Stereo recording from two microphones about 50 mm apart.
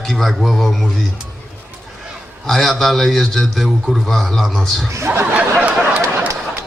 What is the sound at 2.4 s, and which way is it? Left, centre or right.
A man's voice, centre.